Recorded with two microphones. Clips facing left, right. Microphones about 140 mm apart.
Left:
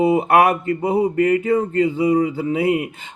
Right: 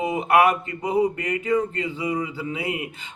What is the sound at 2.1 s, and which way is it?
Speech, 45° left (ahead or behind).